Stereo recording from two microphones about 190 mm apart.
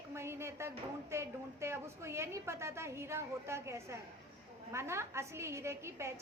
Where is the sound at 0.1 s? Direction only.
15° right (ahead or behind).